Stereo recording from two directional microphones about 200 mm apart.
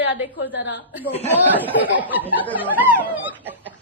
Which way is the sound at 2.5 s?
10° right (ahead or behind).